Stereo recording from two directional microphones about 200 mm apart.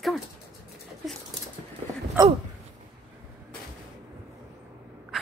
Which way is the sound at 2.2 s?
15° right (ahead or behind).